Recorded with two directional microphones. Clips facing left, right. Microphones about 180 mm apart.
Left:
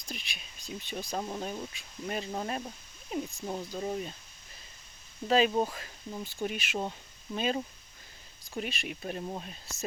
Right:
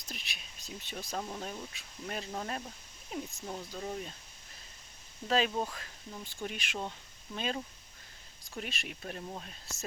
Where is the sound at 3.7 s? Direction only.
15° left (ahead or behind).